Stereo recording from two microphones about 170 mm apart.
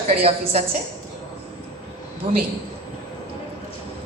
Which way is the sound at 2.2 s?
30° right (ahead or behind).